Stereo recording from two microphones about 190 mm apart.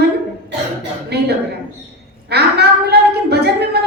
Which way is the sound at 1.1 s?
60° right (ahead or behind).